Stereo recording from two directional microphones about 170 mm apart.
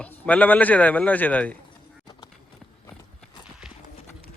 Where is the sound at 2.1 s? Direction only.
20° left (ahead or behind).